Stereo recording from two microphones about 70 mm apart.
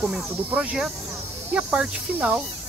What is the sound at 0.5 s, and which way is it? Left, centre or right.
Speech, right.